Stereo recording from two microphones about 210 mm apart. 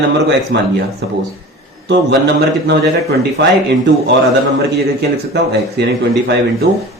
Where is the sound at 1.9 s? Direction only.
55° right (ahead or behind).